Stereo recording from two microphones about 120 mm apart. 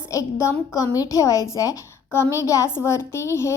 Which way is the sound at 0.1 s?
25° left (ahead or behind).